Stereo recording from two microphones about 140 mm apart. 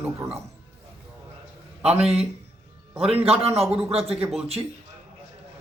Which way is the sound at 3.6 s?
Centre (ahead or behind).